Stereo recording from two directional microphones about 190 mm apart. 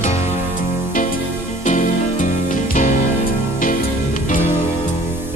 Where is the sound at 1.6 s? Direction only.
40° left (ahead or behind).